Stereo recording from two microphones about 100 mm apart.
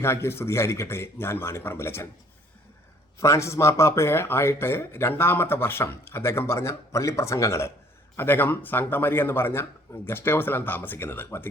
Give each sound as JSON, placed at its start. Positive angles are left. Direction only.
{"t": 0.0, "sound": "speech", "side_deg": 25}
{"t": 3.2, "sound": "speech", "side_deg": 30}